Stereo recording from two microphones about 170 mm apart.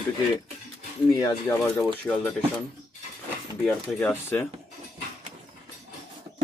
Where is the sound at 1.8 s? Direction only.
5° left (ahead or behind).